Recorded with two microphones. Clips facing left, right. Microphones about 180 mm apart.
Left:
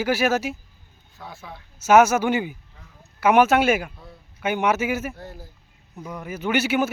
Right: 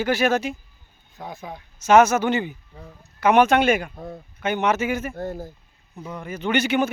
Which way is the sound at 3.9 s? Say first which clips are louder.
Right 10 dB; 50° right (ahead or behind).